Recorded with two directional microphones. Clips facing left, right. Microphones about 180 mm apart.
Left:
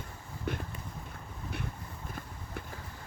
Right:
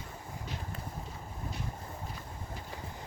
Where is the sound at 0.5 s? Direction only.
60° left (ahead or behind).